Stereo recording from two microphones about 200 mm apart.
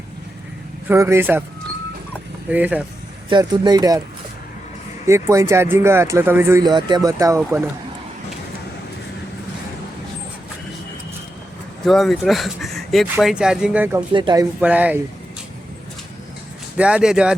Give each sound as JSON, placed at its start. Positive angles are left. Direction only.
{"t": 0.9, "sound": "speech", "side_deg": -10}
{"t": 2.5, "sound": "speech", "side_deg": -5}
{"t": 3.2, "sound": "speech", "side_deg": -20}
{"t": 5.0, "sound": "speech", "side_deg": -15}
{"t": 11.9, "sound": "speech", "side_deg": 0}
{"t": 14.1, "sound": "speech", "side_deg": -25}
{"t": 14.6, "sound": "speech", "side_deg": -5}
{"t": 16.7, "sound": "speech", "side_deg": -5}